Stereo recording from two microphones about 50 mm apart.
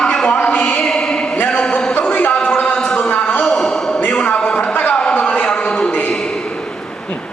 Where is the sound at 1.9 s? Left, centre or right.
Left.